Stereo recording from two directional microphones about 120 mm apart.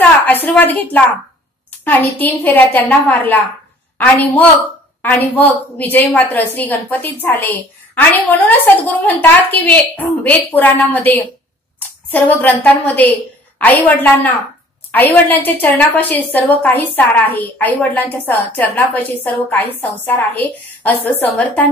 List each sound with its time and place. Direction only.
0.3 s a woman's voice: 15° left (ahead or behind)